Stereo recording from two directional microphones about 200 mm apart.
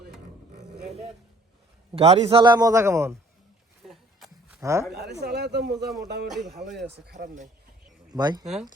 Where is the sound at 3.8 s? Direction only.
Centre (ahead or behind).